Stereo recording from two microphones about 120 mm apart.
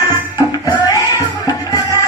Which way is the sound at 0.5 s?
30° left (ahead or behind).